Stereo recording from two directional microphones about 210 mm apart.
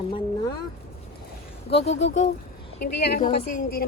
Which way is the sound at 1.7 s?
30° left (ahead or behind).